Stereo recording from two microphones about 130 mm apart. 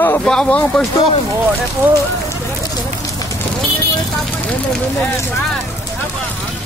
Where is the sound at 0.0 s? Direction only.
15° left (ahead or behind).